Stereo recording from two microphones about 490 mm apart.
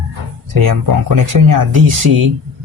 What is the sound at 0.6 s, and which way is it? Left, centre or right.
Speech, right.